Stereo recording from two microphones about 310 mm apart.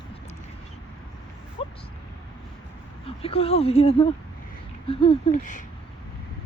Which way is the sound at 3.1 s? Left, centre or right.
Centre.